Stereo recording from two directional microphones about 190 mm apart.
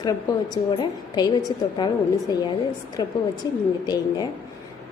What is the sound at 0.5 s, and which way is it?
A woman's voice, 20° left (ahead or behind).